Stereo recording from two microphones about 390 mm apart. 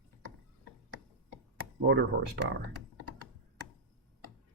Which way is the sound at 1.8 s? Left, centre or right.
Right.